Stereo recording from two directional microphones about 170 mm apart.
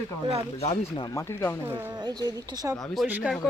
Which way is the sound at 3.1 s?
10° right (ahead or behind).